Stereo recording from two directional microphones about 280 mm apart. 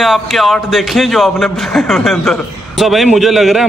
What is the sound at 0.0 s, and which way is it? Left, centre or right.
A man's voice, centre.